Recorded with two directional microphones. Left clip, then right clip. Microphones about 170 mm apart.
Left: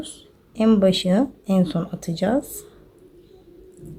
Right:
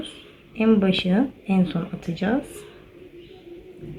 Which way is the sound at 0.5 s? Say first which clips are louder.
Left 3 dB; 55° left (ahead or behind).